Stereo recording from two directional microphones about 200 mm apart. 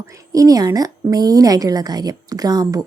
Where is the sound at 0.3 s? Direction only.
20° right (ahead or behind).